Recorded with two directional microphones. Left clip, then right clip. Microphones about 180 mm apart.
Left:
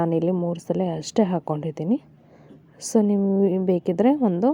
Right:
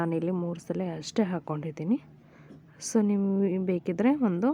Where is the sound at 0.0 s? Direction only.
10° left (ahead or behind).